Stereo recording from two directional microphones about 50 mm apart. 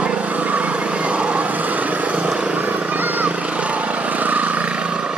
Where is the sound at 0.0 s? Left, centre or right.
Right.